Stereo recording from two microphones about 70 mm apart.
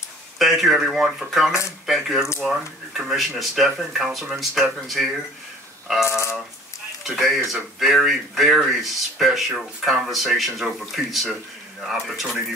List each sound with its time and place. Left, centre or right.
0.4 s speech: centre
6.0 s a sound: left
7.1 s speech: centre